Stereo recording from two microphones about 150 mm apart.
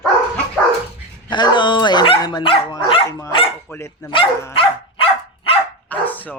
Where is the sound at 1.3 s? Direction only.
30° left (ahead or behind).